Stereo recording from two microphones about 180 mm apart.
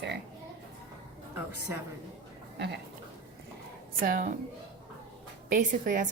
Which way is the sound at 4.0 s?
50° right (ahead or behind).